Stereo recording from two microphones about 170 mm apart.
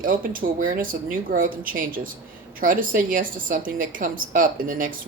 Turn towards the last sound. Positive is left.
turn(degrees=-55)  # may be behind; listen again after turning